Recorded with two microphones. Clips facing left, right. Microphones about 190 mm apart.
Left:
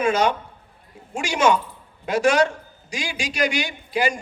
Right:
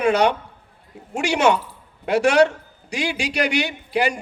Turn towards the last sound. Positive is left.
turn(degrees=-65)  # may be behind; listen again after turning